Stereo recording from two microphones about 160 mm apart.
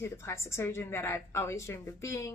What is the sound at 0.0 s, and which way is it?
Speech, 15° left (ahead or behind).